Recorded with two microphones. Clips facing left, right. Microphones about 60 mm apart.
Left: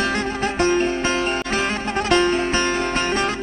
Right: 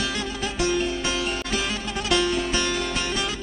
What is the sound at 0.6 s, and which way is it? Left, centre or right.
Music, left.